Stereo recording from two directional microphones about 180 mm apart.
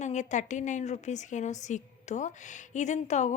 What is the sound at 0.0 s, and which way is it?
A woman's voice, 40° left (ahead or behind).